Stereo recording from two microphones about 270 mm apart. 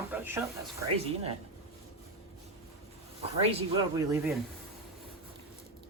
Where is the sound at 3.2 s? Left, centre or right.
Right.